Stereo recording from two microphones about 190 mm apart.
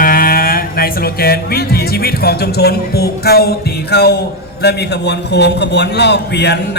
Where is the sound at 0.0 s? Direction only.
50° left (ahead or behind).